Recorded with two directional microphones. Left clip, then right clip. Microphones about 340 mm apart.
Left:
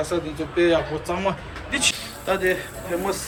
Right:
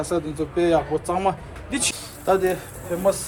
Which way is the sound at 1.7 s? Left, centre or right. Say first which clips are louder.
Left 4 dB; centre.